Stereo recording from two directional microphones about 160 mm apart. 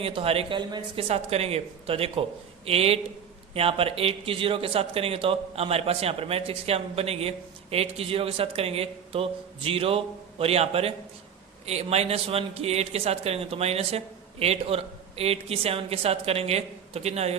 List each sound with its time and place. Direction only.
0.0 s speech: 35° right (ahead or behind)